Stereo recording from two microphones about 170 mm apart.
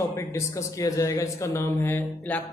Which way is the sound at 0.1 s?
15° left (ahead or behind).